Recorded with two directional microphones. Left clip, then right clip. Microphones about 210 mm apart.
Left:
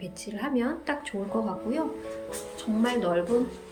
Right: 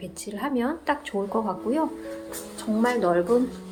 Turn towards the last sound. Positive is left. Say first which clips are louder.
# right 4 dB
turn(degrees=-20)  # may be behind; listen again after turning